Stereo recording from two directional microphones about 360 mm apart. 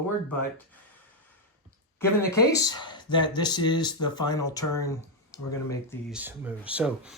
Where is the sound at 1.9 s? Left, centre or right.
Centre.